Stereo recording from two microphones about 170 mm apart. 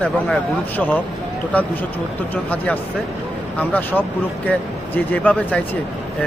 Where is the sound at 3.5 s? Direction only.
10° left (ahead or behind).